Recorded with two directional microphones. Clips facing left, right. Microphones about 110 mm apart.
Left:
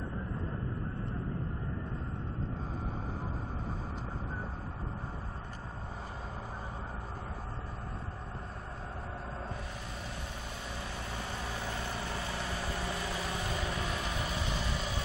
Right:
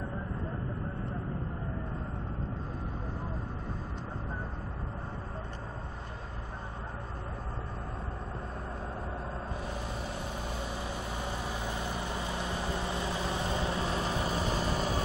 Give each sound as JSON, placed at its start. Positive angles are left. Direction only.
{"t": 10.8, "sound": "vehicle", "side_deg": -15}